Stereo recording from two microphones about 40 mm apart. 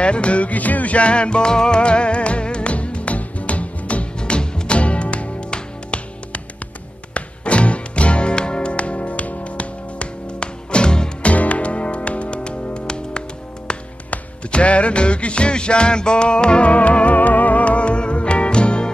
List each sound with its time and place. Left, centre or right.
0.0 s music: left
4.2 s music: left
11.3 s music: left
14.5 s music: left